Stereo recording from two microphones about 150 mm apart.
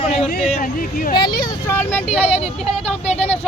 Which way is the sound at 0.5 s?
65° left (ahead or behind).